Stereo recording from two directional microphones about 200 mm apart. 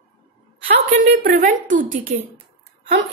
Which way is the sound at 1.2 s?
40° right (ahead or behind).